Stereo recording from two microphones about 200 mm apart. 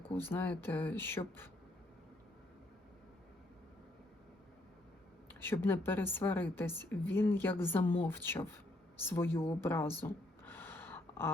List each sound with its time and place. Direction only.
0.1 s a woman's voice: 10° left (ahead or behind)
5.3 s a woman's voice: 10° left (ahead or behind)
10.0 s a sound: 10° left (ahead or behind)